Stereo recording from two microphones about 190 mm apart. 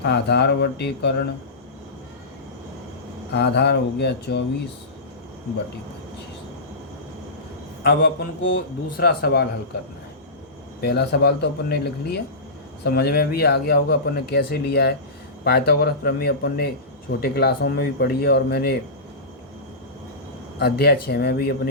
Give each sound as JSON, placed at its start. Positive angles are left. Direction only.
{"t": 0.0, "sound": "a man's voice", "side_deg": 60}
{"t": 3.3, "sound": "a man's voice", "side_deg": 60}
{"t": 7.9, "sound": "a man's voice", "side_deg": 65}
{"t": 10.8, "sound": "a man's voice", "side_deg": 60}
{"t": 20.6, "sound": "a man's voice", "side_deg": 55}